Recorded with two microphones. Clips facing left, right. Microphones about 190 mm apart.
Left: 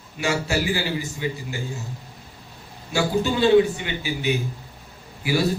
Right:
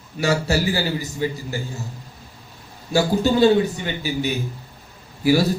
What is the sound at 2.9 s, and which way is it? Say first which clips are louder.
A man's voice: right 4 dB; 40° right (ahead or behind).